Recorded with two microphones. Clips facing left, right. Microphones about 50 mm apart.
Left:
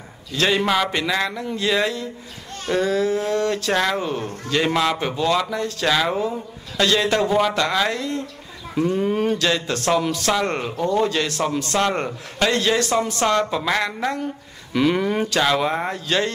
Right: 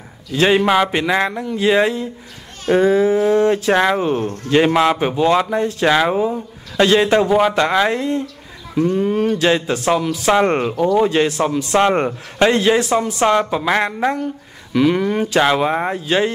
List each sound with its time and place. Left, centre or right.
0.3 s speech: centre
6.1 s speech: centre
6.8 s speech: right
8.7 s speech: centre
9.4 s speech: right
9.8 s speech: centre
10.3 s speech: right
14.2 s speech: centre
15.2 s speech: centre